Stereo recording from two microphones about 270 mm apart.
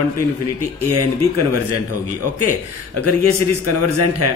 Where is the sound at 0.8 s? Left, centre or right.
Right.